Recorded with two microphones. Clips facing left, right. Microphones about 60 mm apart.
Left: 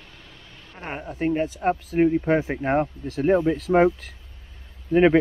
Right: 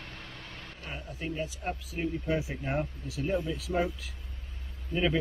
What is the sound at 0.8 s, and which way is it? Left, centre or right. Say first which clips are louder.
Speech: left 13 dB; left.